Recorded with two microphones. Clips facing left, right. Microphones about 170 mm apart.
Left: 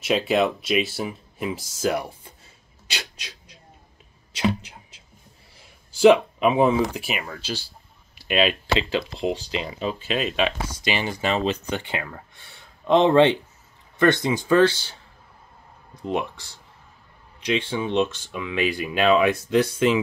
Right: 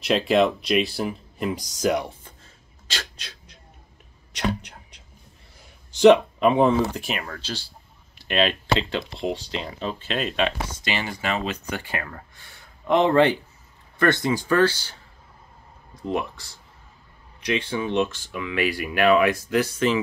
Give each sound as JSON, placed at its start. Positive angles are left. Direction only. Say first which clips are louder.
{"t": 0.0, "sound": "speech", "louder": "right 1 dB", "side_deg": 0}
{"t": 4.4, "sound": "a sound", "louder": "left 3 dB", "side_deg": 5}
{"t": 6.8, "sound": "speech", "louder": "even", "side_deg": 10}
{"t": 10.8, "sound": "speech", "louder": "left 5 dB", "side_deg": 15}
{"t": 16.0, "sound": "speech", "louder": "even", "side_deg": 20}
{"t": 17.5, "sound": "speech", "louder": "left 1 dB", "side_deg": 20}